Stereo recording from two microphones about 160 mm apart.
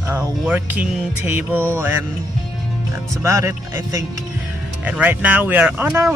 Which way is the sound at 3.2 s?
20° right (ahead or behind).